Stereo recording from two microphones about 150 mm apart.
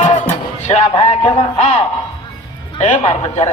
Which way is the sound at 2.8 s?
50° left (ahead or behind).